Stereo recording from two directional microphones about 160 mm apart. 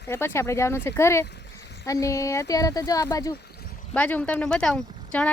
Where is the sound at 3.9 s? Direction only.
10° left (ahead or behind).